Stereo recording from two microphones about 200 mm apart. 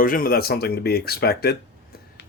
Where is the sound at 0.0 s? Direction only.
45° left (ahead or behind).